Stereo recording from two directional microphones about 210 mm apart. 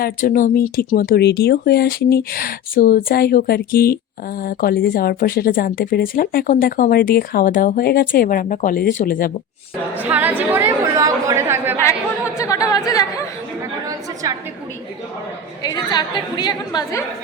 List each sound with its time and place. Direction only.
0.0 s a woman's voice: 40° left (ahead or behind)
9.9 s chatter: 5° right (ahead or behind)
12.4 s chatter: 15° left (ahead or behind)
13.8 s a sound: 15° right (ahead or behind)
15.6 s a woman's voice: 20° left (ahead or behind)